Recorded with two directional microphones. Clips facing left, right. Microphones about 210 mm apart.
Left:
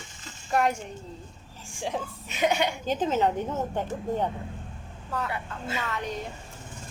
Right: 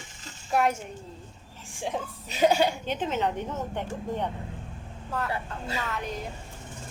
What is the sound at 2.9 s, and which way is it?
Speech, 40° left (ahead or behind).